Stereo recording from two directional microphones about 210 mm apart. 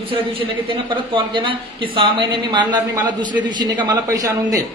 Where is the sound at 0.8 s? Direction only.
25° right (ahead or behind).